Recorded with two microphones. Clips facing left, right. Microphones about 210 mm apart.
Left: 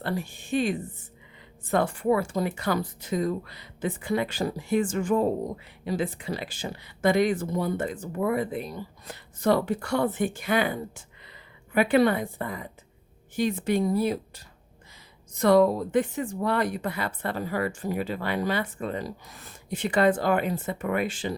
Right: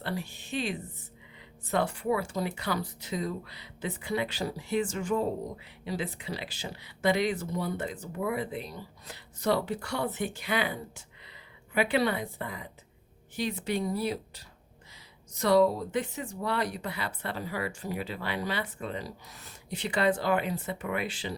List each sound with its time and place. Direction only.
0.0 s speech: 50° left (ahead or behind)